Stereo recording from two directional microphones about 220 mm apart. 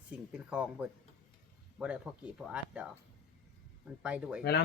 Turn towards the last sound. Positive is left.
turn(degrees=-5)  # may be behind; listen again after turning